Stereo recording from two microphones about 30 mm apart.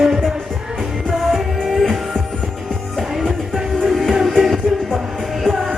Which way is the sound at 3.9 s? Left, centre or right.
Centre.